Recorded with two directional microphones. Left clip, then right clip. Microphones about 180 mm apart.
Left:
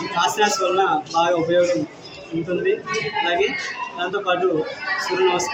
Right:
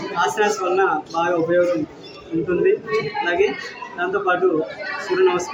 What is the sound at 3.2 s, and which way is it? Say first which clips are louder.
A man's voice: even; 5° right (ahead or behind).